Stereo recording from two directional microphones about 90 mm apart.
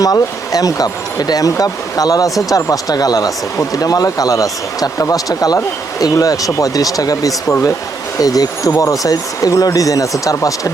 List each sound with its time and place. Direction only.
0.0 s speech: 40° left (ahead or behind)